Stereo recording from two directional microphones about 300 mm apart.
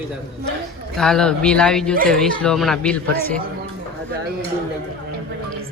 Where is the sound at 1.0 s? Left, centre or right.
Centre.